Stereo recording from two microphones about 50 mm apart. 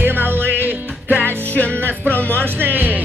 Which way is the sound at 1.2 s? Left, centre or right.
Left.